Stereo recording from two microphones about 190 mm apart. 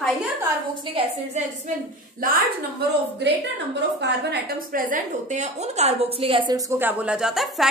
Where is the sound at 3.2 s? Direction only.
65° right (ahead or behind); by 7.7 s centre (ahead or behind).